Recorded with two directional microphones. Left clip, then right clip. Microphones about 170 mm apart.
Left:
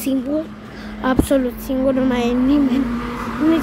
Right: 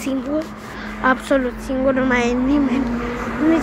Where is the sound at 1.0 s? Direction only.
25° left (ahead or behind).